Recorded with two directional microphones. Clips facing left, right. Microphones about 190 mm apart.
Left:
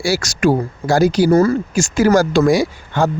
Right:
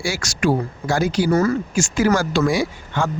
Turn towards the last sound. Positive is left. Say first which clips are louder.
# left 5 dB
turn(degrees=40)  # may be behind; listen again after turning